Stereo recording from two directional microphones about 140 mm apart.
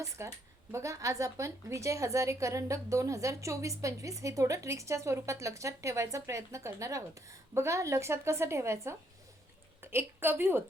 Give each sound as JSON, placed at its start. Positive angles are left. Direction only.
{"t": 0.2, "sound": "a woman's voice", "side_deg": -20}